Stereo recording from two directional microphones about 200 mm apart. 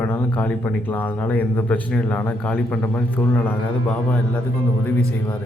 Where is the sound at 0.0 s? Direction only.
10° left (ahead or behind).